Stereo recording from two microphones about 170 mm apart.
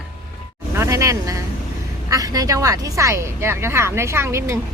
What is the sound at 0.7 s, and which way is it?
Speech, 15° right (ahead or behind).